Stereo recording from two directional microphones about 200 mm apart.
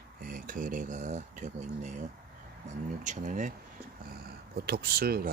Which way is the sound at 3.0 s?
40° right (ahead or behind).